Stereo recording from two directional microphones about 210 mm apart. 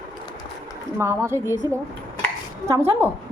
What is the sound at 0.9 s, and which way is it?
Speech, 10° right (ahead or behind).